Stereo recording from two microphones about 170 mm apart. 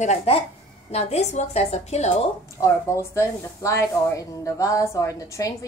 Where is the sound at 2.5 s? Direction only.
15° left (ahead or behind).